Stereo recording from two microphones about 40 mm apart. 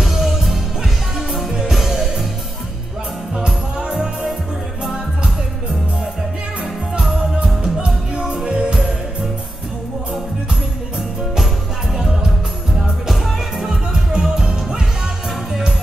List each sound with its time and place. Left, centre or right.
0.0 s music: centre
1.7 s music: centre
3.8 s music: right
7.0 s music: centre
12.0 s music: centre